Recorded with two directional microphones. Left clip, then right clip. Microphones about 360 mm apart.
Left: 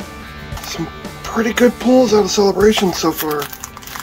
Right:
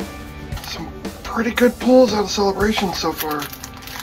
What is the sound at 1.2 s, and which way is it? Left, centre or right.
Speech, left.